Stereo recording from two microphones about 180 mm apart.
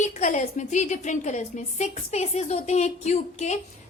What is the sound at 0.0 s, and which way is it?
A woman's voice, 40° left (ahead or behind).